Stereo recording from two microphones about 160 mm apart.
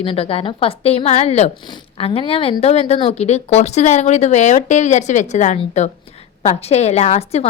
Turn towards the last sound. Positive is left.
turn(degrees=40)  # may be behind; listen again after turning